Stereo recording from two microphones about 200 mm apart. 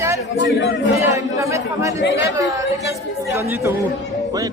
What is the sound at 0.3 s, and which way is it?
Speech, 60° left (ahead or behind).